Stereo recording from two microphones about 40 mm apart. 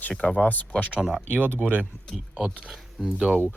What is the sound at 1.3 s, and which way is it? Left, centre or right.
Speech, right.